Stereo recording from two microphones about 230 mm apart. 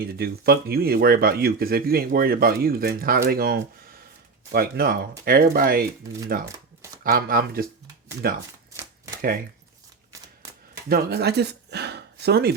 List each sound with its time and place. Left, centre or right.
0.0 s speech: right
7.0 s speech: right
10.8 s speech: right